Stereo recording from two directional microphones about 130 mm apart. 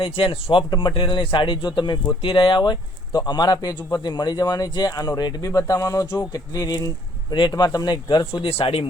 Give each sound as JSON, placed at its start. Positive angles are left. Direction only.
{"t": 0.0, "sound": "a man's voice", "side_deg": 45}
{"t": 8.4, "sound": "speech", "side_deg": 45}